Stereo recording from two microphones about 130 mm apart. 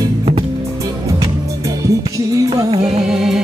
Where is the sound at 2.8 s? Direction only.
5° right (ahead or behind).